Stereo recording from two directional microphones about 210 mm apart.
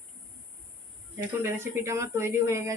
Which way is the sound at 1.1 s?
10° right (ahead or behind).